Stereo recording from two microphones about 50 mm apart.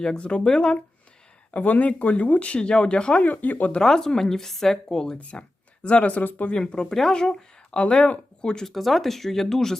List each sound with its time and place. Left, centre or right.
0.0 s speech: centre
1.5 s speech: left
3.8 s speech: centre
5.1 s speech: left
6.6 s speech: centre
8.6 s speech: centre